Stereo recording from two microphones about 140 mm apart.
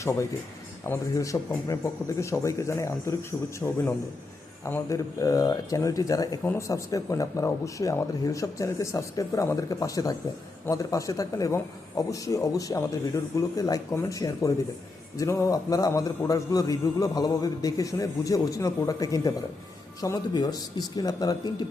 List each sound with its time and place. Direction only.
0.0 s a man's voice: 20° left (ahead or behind)